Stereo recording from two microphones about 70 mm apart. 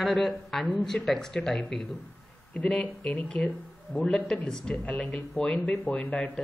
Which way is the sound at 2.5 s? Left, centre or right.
Centre.